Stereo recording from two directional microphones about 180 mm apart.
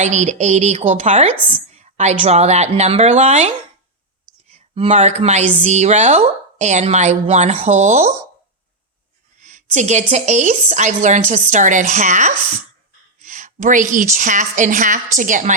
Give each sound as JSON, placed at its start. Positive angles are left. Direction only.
{"t": 0.0, "sound": "speech", "side_deg": -40}
{"t": 4.5, "sound": "speech", "side_deg": -35}
{"t": 9.4, "sound": "a woman's voice", "side_deg": -40}